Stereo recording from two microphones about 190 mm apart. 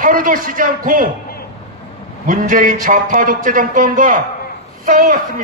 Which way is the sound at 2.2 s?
45° right (ahead or behind).